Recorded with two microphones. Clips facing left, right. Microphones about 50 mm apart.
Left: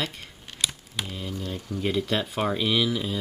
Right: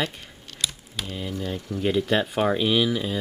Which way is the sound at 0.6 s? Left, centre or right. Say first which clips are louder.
Even; centre.